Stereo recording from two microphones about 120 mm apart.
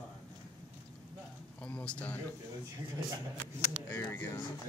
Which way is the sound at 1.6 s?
10° left (ahead or behind).